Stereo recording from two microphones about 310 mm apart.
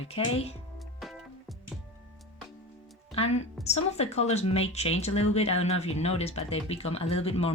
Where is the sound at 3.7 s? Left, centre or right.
Centre.